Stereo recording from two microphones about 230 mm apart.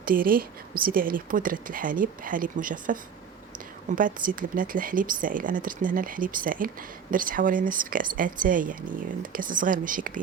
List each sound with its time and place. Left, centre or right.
0.0 s a woman's voice: right